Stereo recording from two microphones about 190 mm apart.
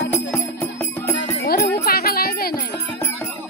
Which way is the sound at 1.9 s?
55° left (ahead or behind).